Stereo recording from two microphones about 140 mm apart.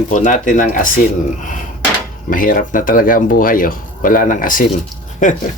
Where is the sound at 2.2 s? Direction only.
85° left.